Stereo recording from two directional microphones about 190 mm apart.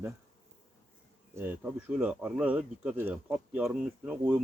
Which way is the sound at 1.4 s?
10° right (ahead or behind).